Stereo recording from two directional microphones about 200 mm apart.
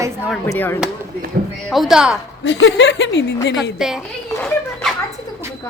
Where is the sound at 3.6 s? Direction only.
Centre (ahead or behind).